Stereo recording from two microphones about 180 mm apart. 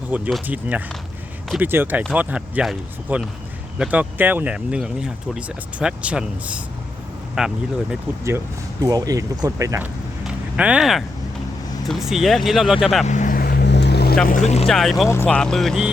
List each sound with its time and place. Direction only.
0.1 s speech: 5° right (ahead or behind)
8.8 s speech: 20° right (ahead or behind)
10.2 s a sound: 5° right (ahead or behind)
11.9 s speech: centre (ahead or behind)
13.1 s vehicle: 45° left (ahead or behind); by 14.2 s 65° left (ahead or behind)
14.7 s speech: centre (ahead or behind)